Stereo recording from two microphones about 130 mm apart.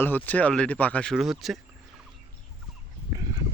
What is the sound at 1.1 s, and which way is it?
Speech, 5° right (ahead or behind).